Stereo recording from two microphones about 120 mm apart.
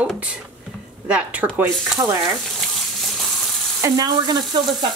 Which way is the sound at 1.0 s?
15° right (ahead or behind).